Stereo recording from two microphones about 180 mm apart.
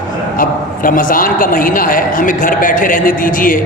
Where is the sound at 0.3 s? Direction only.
50° left (ahead or behind).